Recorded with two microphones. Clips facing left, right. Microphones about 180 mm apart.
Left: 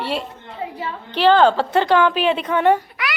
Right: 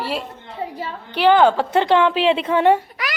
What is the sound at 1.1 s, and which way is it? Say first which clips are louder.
A woman's voice: even; 15° right (ahead or behind).